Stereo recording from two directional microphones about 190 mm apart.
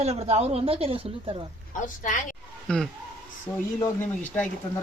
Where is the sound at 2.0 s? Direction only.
45° left (ahead or behind).